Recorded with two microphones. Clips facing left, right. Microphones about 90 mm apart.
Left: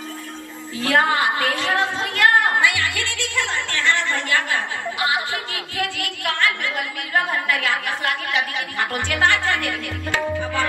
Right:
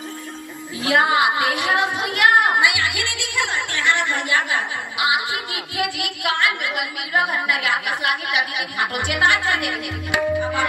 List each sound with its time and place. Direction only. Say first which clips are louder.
0.7 s speech: right 1 dB; 15° right (ahead or behind)